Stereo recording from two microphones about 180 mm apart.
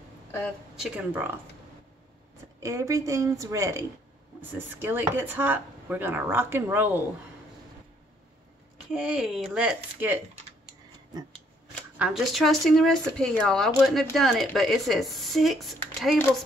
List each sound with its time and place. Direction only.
0.7 s speech: 10° right (ahead or behind)
2.6 s speech: 20° right (ahead or behind)
8.9 s speech: 5° right (ahead or behind)
12.0 s speech: centre (ahead or behind)